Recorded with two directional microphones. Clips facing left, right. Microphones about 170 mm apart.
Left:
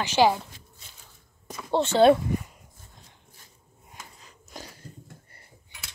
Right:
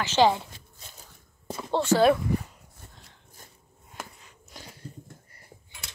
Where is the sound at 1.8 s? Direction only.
25° left (ahead or behind).